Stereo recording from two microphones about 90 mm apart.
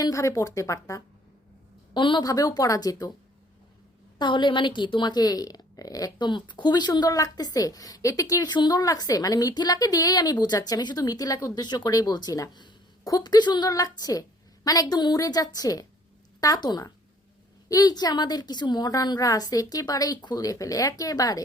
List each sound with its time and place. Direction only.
0.0 s speech: 35° left (ahead or behind)
1.9 s a woman's voice: 60° left (ahead or behind)
2.2 s speech: 40° left (ahead or behind)
4.2 s a woman's voice: 60° left (ahead or behind); by 21.4 s 40° left (ahead or behind)